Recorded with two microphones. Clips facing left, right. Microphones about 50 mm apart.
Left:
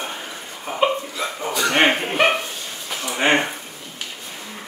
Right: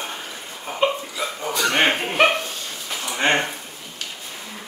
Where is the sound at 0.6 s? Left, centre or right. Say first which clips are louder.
Left 1 dB; centre.